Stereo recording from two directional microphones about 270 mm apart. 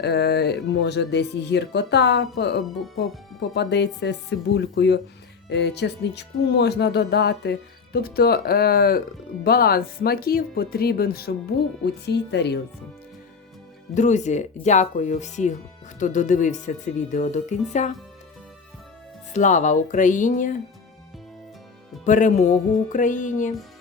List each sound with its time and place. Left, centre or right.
0.0 s speech: left
13.9 s speech: left
19.3 s speech: left
22.0 s speech: left